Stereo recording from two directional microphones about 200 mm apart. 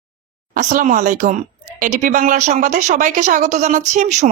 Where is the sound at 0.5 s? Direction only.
40° right (ahead or behind).